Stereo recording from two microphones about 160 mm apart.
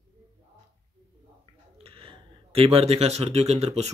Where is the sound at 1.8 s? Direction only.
35° right (ahead or behind).